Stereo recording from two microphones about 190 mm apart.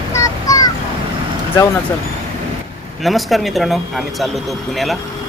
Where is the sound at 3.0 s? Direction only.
Centre (ahead or behind).